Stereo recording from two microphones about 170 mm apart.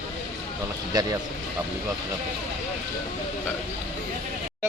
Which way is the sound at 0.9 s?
25° right (ahead or behind).